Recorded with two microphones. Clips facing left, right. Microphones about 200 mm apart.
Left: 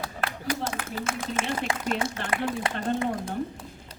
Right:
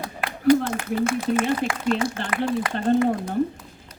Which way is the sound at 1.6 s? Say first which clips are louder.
Right 4 dB; 40° right (ahead or behind).